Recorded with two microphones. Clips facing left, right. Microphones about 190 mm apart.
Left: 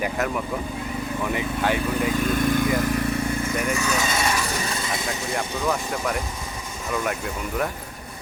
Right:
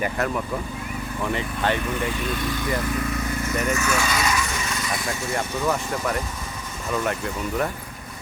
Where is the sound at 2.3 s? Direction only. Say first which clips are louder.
Left 6 dB; 50° left (ahead or behind).